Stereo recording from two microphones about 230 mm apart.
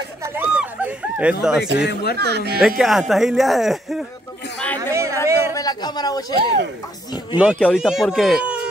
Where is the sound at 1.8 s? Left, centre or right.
Left.